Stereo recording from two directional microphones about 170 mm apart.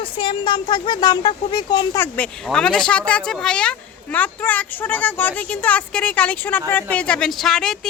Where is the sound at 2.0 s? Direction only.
10° left (ahead or behind).